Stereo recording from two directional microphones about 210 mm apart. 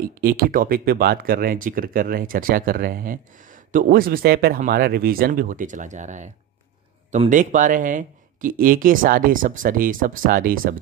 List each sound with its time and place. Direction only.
0.0 s speech: 45° right (ahead or behind)